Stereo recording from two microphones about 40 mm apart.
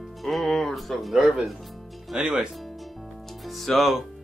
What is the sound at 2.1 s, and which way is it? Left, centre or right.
Speech, centre.